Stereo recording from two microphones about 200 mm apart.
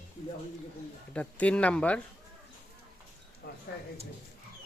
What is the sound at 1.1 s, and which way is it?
Speech, 5° left (ahead or behind).